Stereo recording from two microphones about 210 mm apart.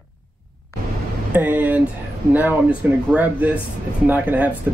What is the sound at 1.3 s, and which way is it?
Speech, 5° right (ahead or behind).